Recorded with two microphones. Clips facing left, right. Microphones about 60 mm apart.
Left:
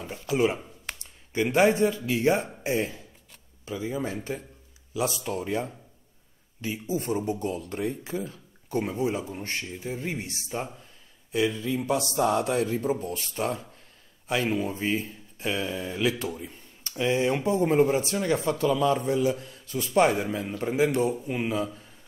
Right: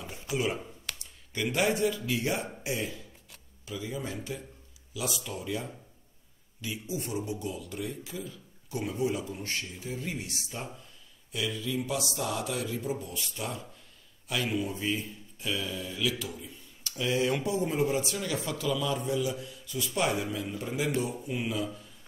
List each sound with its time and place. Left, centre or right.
0.1 s speech: left
15.9 s speech: left
17.0 s speech: left